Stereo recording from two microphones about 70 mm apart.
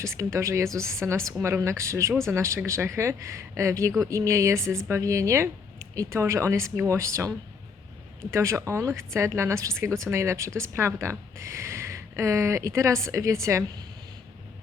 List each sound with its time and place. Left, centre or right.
0.0 s speech: right